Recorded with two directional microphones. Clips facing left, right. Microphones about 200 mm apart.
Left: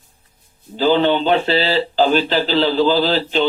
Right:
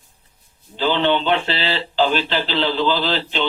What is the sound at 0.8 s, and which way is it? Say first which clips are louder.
Speech: left 4 dB; 40° left (ahead or behind).